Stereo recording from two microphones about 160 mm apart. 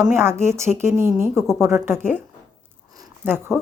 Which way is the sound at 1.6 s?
15° right (ahead or behind).